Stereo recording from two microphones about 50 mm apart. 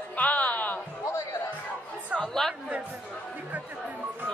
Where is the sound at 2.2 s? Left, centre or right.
Centre.